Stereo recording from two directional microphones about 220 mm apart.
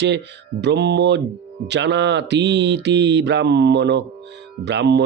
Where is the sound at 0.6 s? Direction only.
50° right (ahead or behind).